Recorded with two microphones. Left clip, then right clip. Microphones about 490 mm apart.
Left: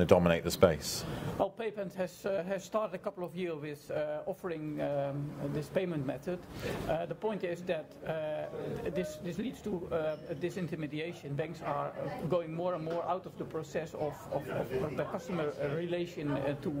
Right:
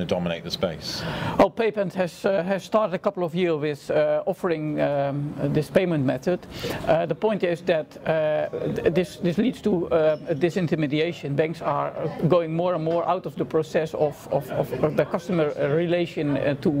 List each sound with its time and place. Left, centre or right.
0.0 s speech: left
1.4 s speech: right
15.0 s speech: right